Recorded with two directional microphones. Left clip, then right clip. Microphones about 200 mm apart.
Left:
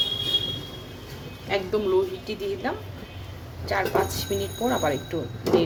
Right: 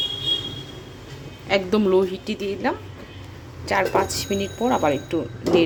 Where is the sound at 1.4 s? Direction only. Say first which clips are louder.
Right 5 dB; 50° right (ahead or behind); by 5.1 s 25° right (ahead or behind).